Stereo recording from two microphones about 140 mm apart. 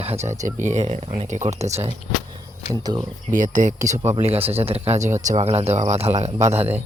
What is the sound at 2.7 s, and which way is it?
Speech, 30° right (ahead or behind).